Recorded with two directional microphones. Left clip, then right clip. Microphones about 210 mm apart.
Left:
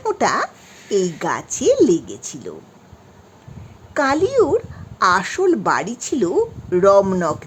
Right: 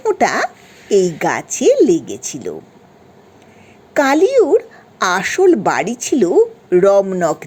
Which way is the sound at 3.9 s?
10° right (ahead or behind).